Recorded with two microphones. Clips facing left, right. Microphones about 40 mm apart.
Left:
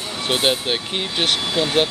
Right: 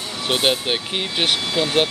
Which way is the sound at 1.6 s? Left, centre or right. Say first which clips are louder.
Even; centre.